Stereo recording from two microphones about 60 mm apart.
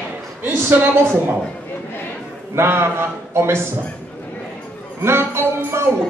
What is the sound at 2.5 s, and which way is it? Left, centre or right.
A man's voice, right.